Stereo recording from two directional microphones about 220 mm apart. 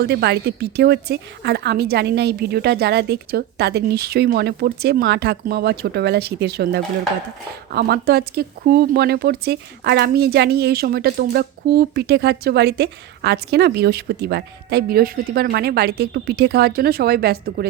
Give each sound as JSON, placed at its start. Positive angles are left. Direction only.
{"t": 0.0, "sound": "speech", "side_deg": -50}